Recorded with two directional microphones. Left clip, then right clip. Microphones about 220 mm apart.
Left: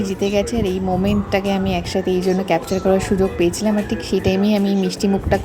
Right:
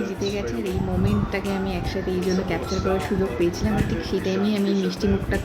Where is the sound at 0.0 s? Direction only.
35° left (ahead or behind).